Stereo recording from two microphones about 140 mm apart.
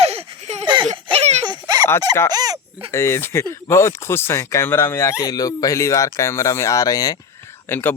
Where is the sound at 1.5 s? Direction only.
30° right (ahead or behind).